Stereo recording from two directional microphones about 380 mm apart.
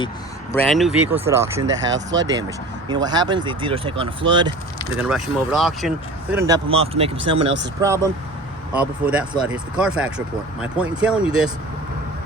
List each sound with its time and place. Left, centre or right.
0.5 s speech: centre
1.6 s speech: right
2.1 s speech: centre
4.9 s speech: centre